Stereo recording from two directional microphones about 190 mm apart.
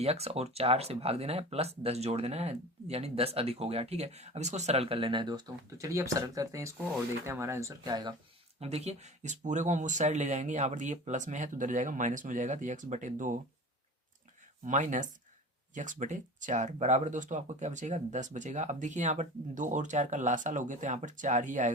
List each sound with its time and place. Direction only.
0.0 s speech: 35° right (ahead or behind)
8.6 s speech: 35° right (ahead or behind)
14.6 s speech: 40° right (ahead or behind)